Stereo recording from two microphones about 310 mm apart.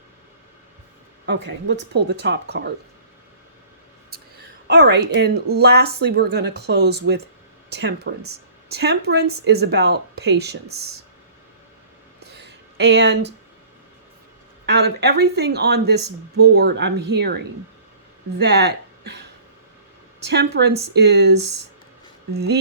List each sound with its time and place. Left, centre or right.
1.3 s speech: right
4.7 s speech: right
12.2 s a sound: right
14.7 s speech: right
20.2 s speech: right